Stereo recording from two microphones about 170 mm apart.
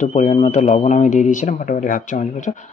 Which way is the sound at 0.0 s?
40° left (ahead or behind).